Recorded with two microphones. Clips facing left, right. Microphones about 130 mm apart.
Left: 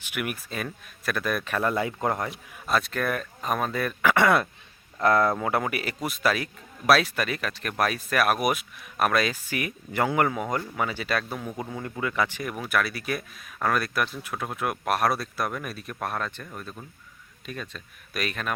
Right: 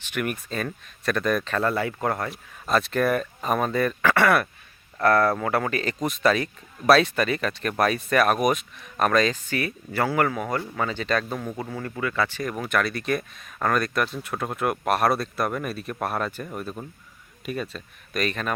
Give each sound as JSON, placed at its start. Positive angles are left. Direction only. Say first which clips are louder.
{"t": 0.0, "sound": "speech", "louder": "right 3 dB", "side_deg": 10}
{"t": 2.3, "sound": "speech", "louder": "right 3 dB", "side_deg": 0}
{"t": 4.0, "sound": "speech", "louder": "left 1 dB", "side_deg": 15}
{"t": 11.5, "sound": "speech", "louder": "right 2 dB", "side_deg": 15}